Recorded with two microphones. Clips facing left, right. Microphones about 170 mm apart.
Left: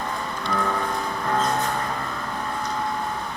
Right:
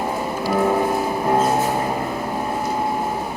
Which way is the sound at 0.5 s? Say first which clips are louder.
Right 7 dB; 25° right (ahead or behind).